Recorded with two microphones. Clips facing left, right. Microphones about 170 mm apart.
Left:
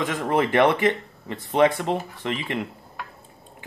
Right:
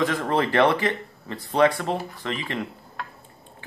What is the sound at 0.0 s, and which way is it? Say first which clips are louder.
Speech: even; 15° left (ahead or behind).